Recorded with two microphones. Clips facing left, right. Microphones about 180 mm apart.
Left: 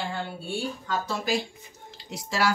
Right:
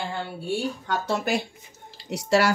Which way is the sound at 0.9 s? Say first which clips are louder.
Right 2 dB; 65° right (ahead or behind).